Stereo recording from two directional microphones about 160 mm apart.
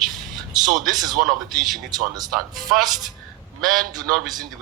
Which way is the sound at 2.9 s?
25° right (ahead or behind).